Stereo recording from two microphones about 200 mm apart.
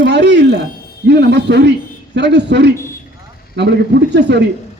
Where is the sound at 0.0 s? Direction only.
60° right (ahead or behind).